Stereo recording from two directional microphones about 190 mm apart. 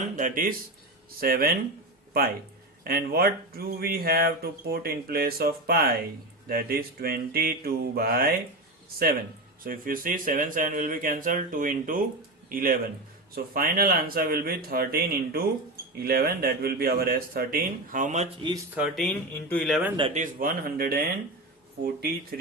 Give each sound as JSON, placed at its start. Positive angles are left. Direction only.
{"t": 0.0, "sound": "a sound", "side_deg": -45}
{"t": 1.2, "sound": "speech", "side_deg": -50}
{"t": 9.6, "sound": "speech", "side_deg": -45}
{"t": 18.7, "sound": "speech", "side_deg": -5}
{"t": 19.0, "sound": "speech", "side_deg": 10}
{"t": 20.1, "sound": "speech", "side_deg": -50}